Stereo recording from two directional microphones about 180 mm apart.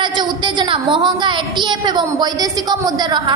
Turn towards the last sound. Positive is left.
turn(degrees=-25)  # may be behind; listen again after turning